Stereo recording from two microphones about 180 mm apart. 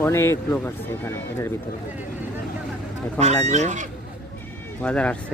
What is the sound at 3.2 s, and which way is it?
Fowl, 40° right (ahead or behind).